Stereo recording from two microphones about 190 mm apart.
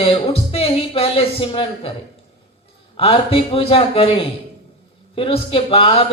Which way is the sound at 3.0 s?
30° left (ahead or behind).